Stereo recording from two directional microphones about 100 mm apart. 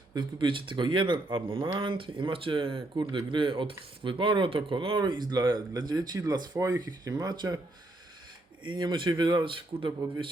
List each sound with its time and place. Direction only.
0.1 s speech: 50° right (ahead or behind)
8.7 s speech: 55° right (ahead or behind)